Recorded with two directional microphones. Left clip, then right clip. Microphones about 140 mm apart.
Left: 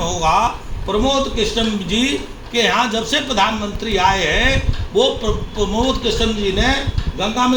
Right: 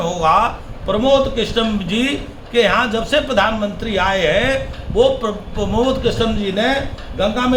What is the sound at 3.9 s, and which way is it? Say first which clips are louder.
A man's voice: even; 10° right (ahead or behind).